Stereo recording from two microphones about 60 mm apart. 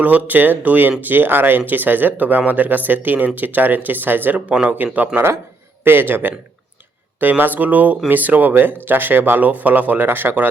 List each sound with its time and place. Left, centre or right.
0.0 s speech: right